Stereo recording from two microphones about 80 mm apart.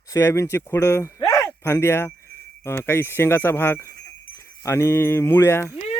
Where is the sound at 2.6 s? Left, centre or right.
Left.